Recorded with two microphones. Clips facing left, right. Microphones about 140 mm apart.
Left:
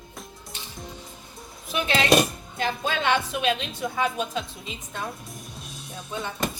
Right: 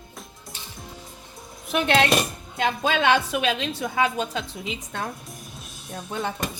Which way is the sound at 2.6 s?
90° right.